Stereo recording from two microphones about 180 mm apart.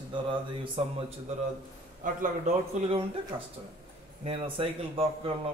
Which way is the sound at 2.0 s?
45° right (ahead or behind).